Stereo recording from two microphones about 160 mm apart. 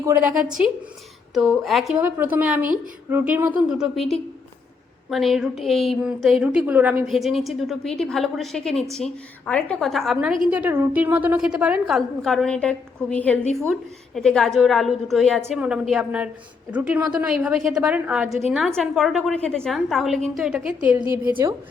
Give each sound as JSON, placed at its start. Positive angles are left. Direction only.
{"t": 0.0, "sound": "a woman's voice", "side_deg": -10}
{"t": 2.0, "sound": "a woman's voice", "side_deg": -10}